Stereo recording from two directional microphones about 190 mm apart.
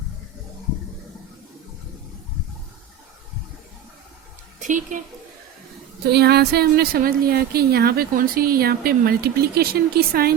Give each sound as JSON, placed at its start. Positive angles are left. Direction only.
{"t": 4.6, "sound": "a woman's voice", "side_deg": -40}
{"t": 6.1, "sound": "speech", "side_deg": -60}